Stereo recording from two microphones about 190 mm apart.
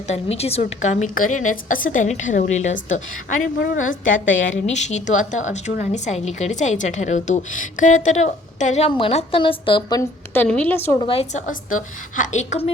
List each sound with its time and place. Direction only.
0.1 s a woman's voice: 35° left (ahead or behind)
4.3 s a woman's voice: 85° left
4.6 s a woman's voice: 40° left (ahead or behind)
10.0 s a woman's voice: 10° left (ahead or behind)
11.0 s a woman's voice: 30° left (ahead or behind)